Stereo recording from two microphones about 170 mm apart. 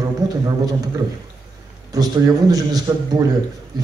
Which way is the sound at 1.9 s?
20° right (ahead or behind).